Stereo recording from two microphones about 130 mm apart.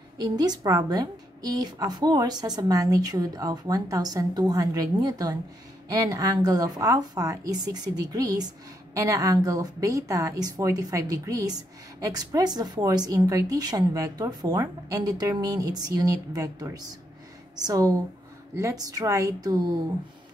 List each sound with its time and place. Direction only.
0.2 s a woman's voice: 30° right (ahead or behind)